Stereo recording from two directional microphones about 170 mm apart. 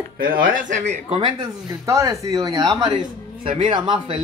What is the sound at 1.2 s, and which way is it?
Speech, 20° right (ahead or behind).